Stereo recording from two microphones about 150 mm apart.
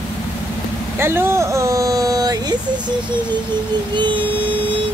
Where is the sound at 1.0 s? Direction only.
15° right (ahead or behind).